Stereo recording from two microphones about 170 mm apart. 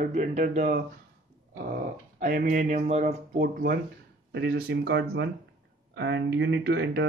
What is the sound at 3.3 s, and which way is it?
Speech, 55° right (ahead or behind).